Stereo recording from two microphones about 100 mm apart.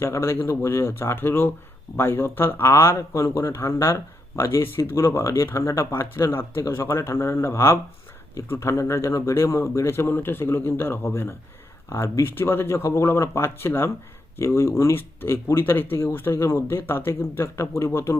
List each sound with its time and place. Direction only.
0.0 s speech: 25° left (ahead or behind)